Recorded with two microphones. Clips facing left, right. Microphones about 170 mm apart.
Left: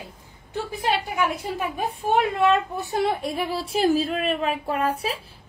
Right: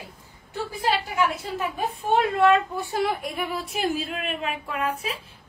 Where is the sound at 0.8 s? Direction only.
15° left (ahead or behind).